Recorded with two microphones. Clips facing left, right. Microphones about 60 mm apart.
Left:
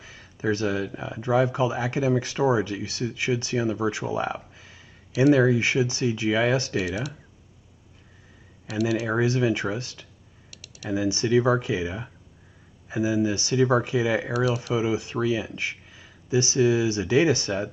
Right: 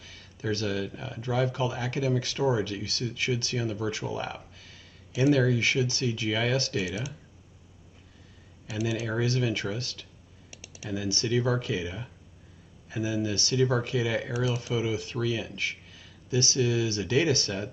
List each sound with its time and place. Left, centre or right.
0.0 s speech: left
9.0 s speech: left
10.5 s computer keyboard: centre
10.9 s speech: left